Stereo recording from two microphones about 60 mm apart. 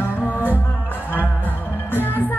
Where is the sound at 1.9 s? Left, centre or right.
Left.